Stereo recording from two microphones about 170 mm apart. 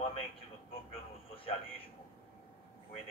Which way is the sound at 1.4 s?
30° left (ahead or behind).